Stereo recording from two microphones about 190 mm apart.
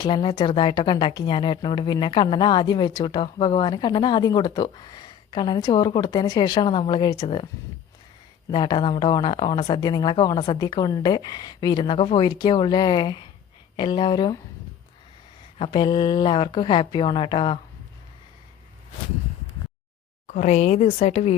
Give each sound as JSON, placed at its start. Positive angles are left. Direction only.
{"t": 0.0, "sound": "speech", "side_deg": 25}
{"t": 15.5, "sound": "speech", "side_deg": 30}
{"t": 20.2, "sound": "speech", "side_deg": 40}